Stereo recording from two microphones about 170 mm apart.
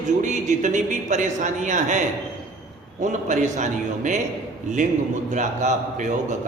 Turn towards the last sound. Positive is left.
turn(degrees=-45)  # may be behind; listen again after turning